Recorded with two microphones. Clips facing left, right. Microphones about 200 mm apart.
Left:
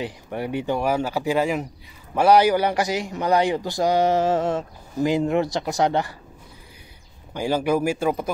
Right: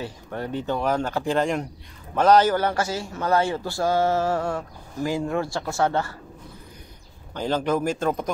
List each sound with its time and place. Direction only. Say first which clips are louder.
0.0 s a man's voice: left 3 dB; 15° left (ahead or behind)
7.3 s a man's voice: left 2 dB; 10° left (ahead or behind)